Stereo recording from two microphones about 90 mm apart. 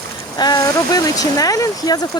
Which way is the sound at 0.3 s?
50° left (ahead or behind).